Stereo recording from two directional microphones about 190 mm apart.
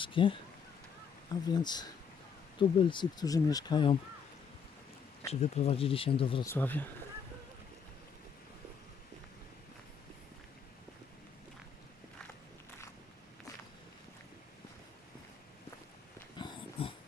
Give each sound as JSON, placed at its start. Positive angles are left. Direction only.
{"t": 0.0, "sound": "speech", "side_deg": 25}
{"t": 5.3, "sound": "speech", "side_deg": 35}
{"t": 6.4, "sound": "speech", "side_deg": 10}
{"t": 16.4, "sound": "dog", "side_deg": 25}